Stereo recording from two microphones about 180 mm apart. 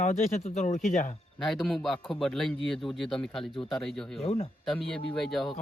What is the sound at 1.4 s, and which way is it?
Speech, centre (ahead or behind).